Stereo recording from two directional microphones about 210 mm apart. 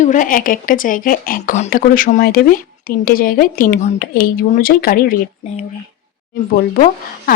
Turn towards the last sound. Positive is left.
turn(degrees=45)  # may be behind; listen again after turning